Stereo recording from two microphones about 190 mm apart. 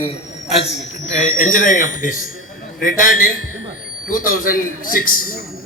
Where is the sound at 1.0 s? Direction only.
40° left (ahead or behind).